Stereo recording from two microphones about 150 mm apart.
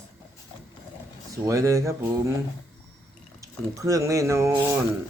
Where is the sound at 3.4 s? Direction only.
20° right (ahead or behind).